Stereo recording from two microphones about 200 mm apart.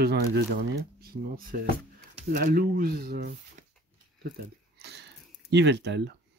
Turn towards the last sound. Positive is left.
turn(degrees=-60)  # may be behind; listen again after turning